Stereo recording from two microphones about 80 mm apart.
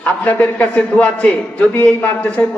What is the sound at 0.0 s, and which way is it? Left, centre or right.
A man's voice, centre.